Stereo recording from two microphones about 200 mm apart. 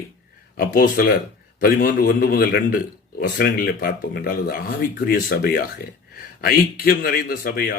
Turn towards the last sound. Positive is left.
turn(degrees=45)  # may be behind; listen again after turning